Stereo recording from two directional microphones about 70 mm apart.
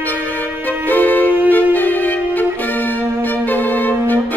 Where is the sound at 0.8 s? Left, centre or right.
Left.